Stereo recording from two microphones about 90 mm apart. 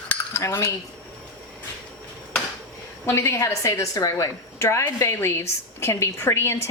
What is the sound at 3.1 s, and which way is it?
A woman's voice, 30° left (ahead or behind).